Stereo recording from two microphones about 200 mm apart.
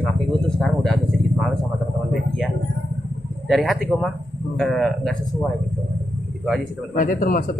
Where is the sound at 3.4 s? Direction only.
Centre (ahead or behind).